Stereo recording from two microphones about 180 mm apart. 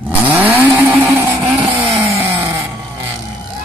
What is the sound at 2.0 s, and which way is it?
Chainsaw, 15° right (ahead or behind).